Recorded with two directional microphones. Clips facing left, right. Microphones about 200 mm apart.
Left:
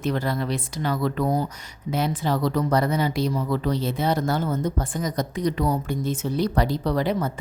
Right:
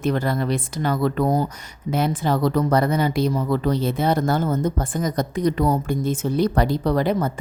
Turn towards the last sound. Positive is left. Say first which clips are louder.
# right 3 dB
turn(degrees=-50)  # may be behind; listen again after turning